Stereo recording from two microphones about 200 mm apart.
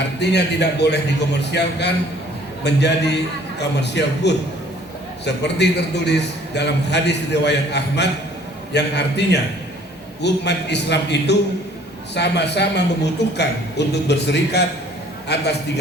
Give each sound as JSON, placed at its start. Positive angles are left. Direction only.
{"t": 0.2, "sound": "a man's voice", "side_deg": 55}